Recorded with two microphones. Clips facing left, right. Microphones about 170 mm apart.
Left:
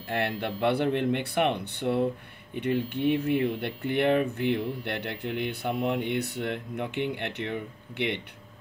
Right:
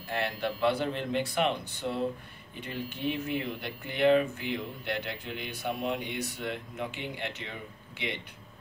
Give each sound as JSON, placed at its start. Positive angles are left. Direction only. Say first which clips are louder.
{"t": 0.1, "sound": "speech", "louder": "left 2 dB", "side_deg": 60}